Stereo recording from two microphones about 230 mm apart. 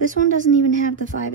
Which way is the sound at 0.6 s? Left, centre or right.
Right.